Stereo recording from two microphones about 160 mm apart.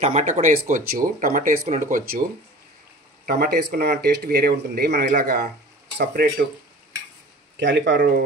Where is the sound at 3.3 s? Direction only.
75° right (ahead or behind).